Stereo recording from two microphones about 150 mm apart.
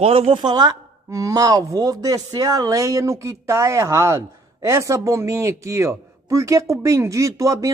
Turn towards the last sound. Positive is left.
turn(degrees=-20)  # may be behind; listen again after turning